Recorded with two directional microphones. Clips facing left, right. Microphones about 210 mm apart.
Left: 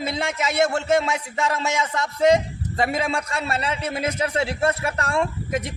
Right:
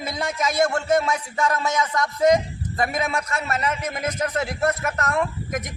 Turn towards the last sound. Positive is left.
turn(degrees=30)  # may be behind; listen again after turning